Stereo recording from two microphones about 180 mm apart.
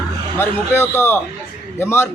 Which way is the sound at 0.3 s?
15° left (ahead or behind).